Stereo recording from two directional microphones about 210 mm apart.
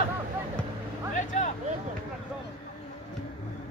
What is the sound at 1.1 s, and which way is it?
Vehicle, 35° left (ahead or behind).